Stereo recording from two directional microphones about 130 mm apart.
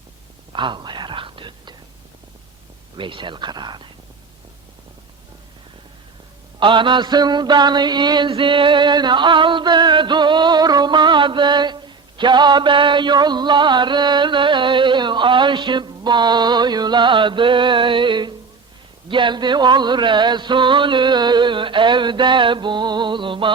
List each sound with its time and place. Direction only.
0.5 s whispering: 40° right (ahead or behind)
3.0 s mantra: 40° right (ahead or behind)
6.6 s mantra: 40° right (ahead or behind)